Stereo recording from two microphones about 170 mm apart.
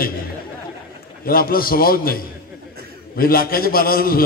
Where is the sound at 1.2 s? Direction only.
60° left (ahead or behind).